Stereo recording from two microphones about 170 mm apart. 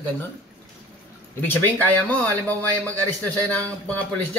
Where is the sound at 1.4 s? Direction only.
10° left (ahead or behind).